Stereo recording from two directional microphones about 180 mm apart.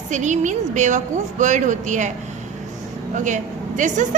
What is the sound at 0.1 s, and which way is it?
A woman's voice, 40° right (ahead or behind).